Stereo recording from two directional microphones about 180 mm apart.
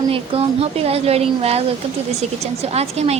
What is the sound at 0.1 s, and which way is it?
A woman's voice, 35° right (ahead or behind).